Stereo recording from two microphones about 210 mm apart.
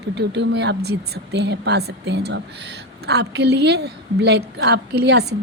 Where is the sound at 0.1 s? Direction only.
55° right (ahead or behind).